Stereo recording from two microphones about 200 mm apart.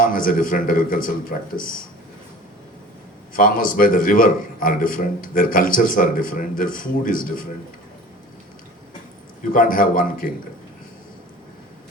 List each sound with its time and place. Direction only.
0.0 s a man's voice: 45° left (ahead or behind)
3.3 s a man's voice: 45° left (ahead or behind)
9.5 s a man's voice: 45° left (ahead or behind)